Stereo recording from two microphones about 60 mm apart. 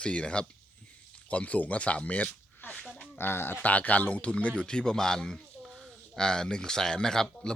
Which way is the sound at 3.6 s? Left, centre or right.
Left.